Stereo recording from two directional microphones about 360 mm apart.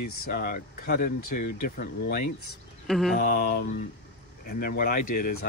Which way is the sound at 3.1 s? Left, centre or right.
Left.